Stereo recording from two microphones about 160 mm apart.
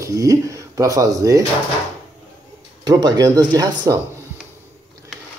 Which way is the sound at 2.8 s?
25° right (ahead or behind).